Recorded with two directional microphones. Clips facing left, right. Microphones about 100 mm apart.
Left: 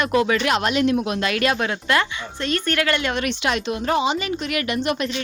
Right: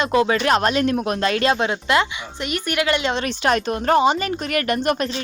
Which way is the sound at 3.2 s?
45° right (ahead or behind).